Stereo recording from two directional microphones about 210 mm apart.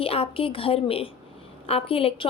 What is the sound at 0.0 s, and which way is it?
A woman's voice, 25° left (ahead or behind).